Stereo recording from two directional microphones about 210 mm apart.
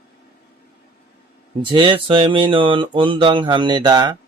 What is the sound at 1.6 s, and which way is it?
Speech, 25° right (ahead or behind).